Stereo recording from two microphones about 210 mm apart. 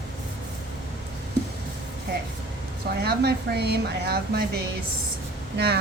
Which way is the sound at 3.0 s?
50° right (ahead or behind).